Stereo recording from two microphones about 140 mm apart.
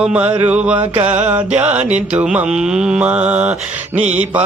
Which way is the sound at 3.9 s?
50° right (ahead or behind).